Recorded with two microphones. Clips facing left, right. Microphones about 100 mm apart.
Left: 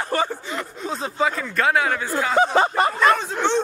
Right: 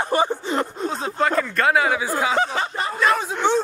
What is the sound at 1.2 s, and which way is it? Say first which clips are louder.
Speech: right 2 dB; centre (ahead or behind).